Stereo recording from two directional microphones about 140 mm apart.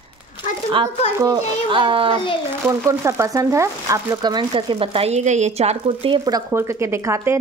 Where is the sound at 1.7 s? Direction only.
40° right (ahead or behind).